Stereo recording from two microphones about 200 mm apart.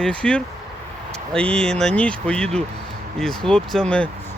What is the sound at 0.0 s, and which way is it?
Speech, 5° left (ahead or behind).